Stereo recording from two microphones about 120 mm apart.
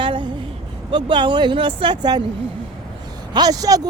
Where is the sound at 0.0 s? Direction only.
45° right (ahead or behind).